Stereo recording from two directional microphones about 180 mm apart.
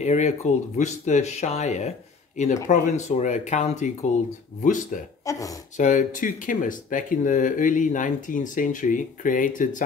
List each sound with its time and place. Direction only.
0.0 s speech: 40° left (ahead or behind)
5.2 s speech: 20° left (ahead or behind)
5.8 s speech: 45° left (ahead or behind)